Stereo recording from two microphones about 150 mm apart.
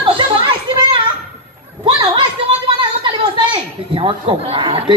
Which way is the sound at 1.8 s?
30° right (ahead or behind).